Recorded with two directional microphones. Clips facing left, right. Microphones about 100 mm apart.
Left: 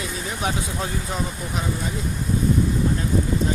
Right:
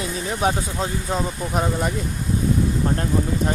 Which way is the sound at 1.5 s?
60° right (ahead or behind).